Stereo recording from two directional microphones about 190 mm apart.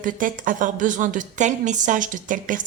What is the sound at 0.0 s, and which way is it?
A woman's voice, 45° right (ahead or behind).